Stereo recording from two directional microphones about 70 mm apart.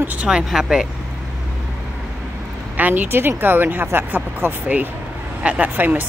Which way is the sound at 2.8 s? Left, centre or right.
Right.